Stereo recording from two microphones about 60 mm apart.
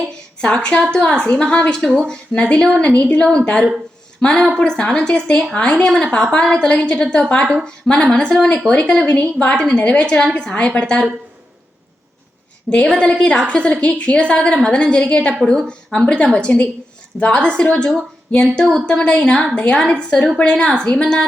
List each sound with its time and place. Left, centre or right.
0.4 s a woman's voice: centre
3.0 s a woman's voice: left
12.7 s a woman's voice: centre